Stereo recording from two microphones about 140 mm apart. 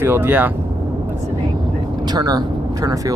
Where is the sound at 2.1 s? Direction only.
30° right (ahead or behind).